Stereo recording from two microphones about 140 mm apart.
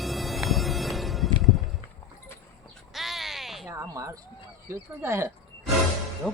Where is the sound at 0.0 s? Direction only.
Centre (ahead or behind).